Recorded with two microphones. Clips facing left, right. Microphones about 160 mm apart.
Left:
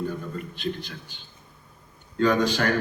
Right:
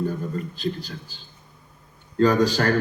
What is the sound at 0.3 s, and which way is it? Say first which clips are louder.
A man's voice: right 3 dB; 35° right (ahead or behind).